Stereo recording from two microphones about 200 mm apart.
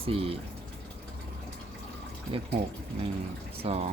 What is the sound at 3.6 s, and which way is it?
Speech, 30° right (ahead or behind).